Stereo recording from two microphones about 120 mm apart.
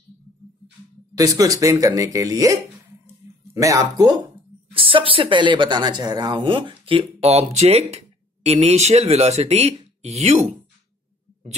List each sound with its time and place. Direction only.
1.1 s speech: 30° right (ahead or behind)
4.7 s speech: 45° right (ahead or behind); by 10.5 s 65° right (ahead or behind)